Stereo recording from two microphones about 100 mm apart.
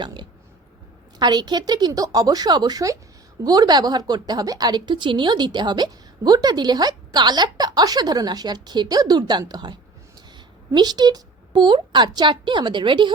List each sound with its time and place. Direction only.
0.0 s a woman's voice: 50° right (ahead or behind)
10.8 s a woman's voice: 45° right (ahead or behind)